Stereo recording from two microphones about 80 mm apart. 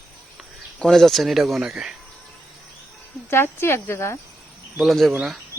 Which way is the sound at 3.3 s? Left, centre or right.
Left.